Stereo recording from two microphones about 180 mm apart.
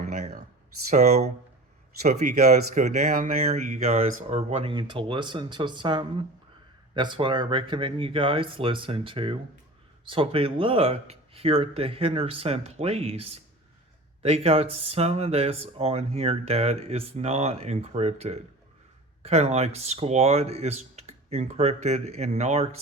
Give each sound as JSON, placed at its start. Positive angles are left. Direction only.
{"t": 0.0, "sound": "a sound", "side_deg": -45}
{"t": 0.9, "sound": "speech", "side_deg": -40}
{"t": 2.5, "sound": "speech", "side_deg": -40}